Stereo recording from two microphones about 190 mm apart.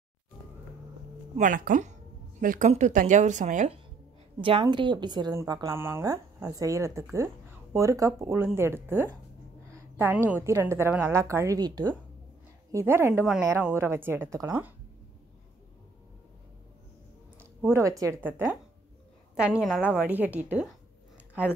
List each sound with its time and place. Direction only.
1.3 s a woman's voice: 45° right (ahead or behind); by 14.7 s 15° right (ahead or behind)
17.4 s speech: 10° right (ahead or behind)
19.6 s a woman's voice: centre (ahead or behind)